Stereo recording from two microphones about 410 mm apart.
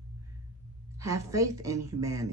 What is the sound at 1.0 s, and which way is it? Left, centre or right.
Speech, centre.